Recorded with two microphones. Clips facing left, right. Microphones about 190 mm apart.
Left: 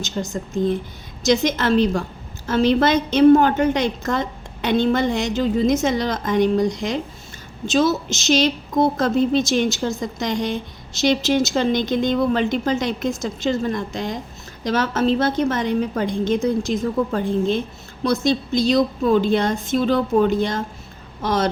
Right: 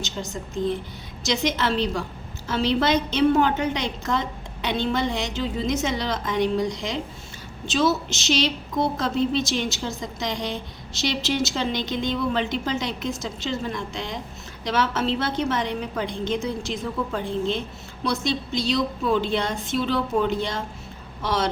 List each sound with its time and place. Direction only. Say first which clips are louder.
0.0 s a woman's voice: left 5 dB; 45° left (ahead or behind)